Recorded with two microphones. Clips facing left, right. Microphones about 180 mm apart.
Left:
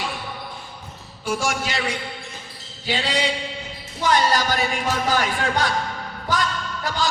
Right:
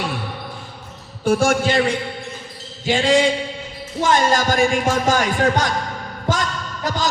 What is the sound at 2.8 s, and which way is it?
Speech, 45° right (ahead or behind).